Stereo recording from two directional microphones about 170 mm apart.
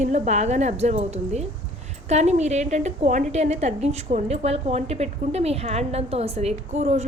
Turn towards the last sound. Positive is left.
turn(degrees=-40)  # may be behind; listen again after turning